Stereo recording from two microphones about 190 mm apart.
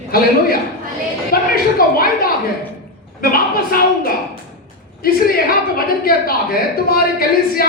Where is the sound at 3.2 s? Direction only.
50° left (ahead or behind).